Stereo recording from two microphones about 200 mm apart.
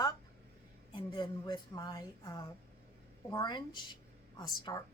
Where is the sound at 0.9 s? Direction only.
20° left (ahead or behind).